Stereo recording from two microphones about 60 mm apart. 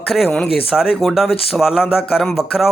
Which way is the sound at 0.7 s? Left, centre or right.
Centre.